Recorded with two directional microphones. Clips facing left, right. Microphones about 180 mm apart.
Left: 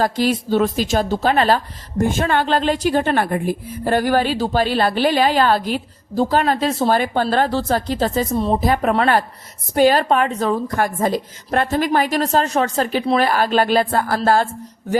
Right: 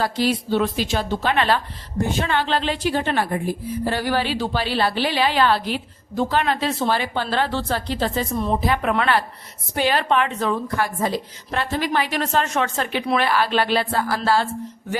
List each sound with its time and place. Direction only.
0.0 s a woman's voice: 45° left (ahead or behind)